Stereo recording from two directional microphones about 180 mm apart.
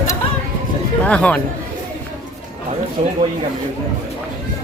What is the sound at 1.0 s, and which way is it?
Speech, 5° left (ahead or behind).